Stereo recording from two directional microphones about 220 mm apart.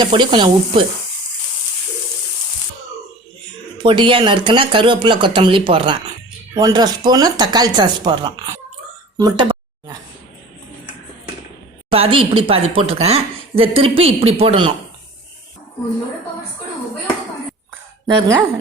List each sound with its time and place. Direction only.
0.0 s speech: 20° right (ahead or behind)
3.8 s speech: 25° right (ahead or behind)
9.1 s a sound: 20° right (ahead or behind)
11.9 s speech: 25° right (ahead or behind)
18.0 s speech: 15° right (ahead or behind)